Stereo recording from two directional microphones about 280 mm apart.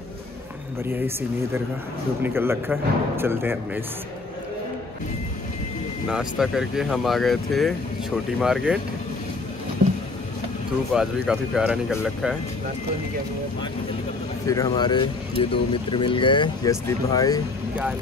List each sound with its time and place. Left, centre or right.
2.2 s speech: centre
6.0 s speech: centre
10.9 s speech: centre
14.4 s speech: centre